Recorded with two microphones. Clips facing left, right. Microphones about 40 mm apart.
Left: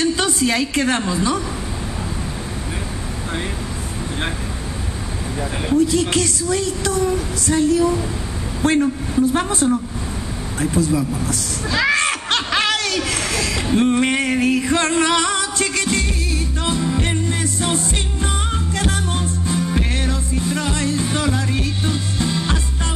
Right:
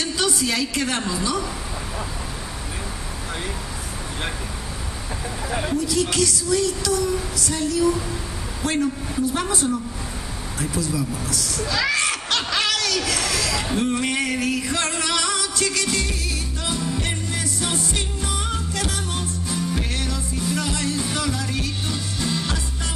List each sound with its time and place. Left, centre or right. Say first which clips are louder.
0.0 s a woman's voice: left 5 dB; left
5.8 s a woman's voice: left 6 dB; left
11.9 s snicker: left 4 dB; left
16.6 s music: left 5 dB; left